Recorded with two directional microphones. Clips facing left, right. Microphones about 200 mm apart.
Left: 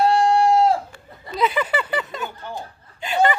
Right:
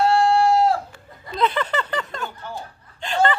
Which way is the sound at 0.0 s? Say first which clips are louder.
Even; 20° left (ahead or behind).